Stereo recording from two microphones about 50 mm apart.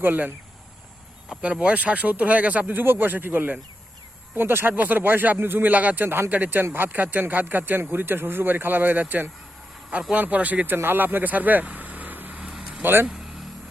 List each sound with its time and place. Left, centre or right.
0.0 s speech: right
1.3 s speech: centre
2.8 s speech: right
6.1 s speech: right
6.3 s speech: right
12.4 s vehicle: right
12.8 s speech: right